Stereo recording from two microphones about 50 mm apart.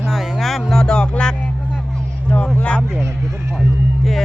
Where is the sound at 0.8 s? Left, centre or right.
Centre.